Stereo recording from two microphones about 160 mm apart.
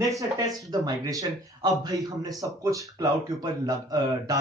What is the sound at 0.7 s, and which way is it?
Speech, 20° right (ahead or behind).